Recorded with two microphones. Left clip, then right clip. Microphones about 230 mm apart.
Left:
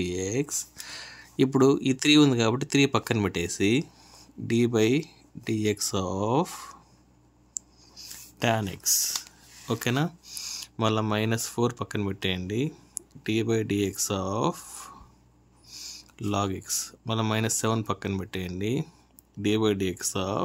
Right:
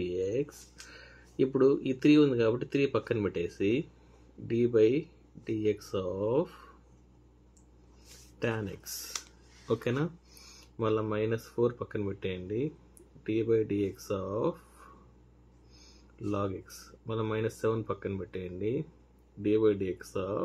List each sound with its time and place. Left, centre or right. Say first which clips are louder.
0.0 s speech: left 2 dB; left
8.4 s speech: left 7 dB; left
16.2 s speech: left 5 dB; left